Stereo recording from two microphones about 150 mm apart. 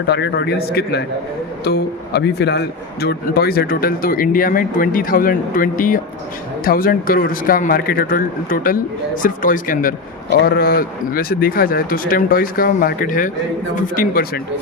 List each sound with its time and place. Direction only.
0.1 s a man's voice: 90° left
2.4 s speech: 90° left; by 9.9 s 65° left (ahead or behind)
10.4 s speech: 85° left